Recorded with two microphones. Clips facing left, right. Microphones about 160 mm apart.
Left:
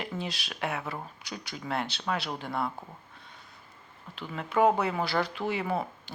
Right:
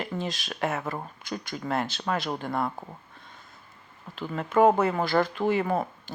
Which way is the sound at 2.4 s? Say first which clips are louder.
Right 3 dB; centre (ahead or behind).